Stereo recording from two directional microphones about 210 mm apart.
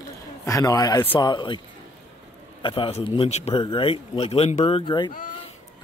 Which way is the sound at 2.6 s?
25° left (ahead or behind).